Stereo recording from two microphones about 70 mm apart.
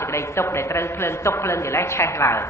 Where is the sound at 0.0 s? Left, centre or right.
Left.